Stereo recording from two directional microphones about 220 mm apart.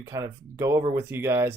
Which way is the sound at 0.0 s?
15° right (ahead or behind).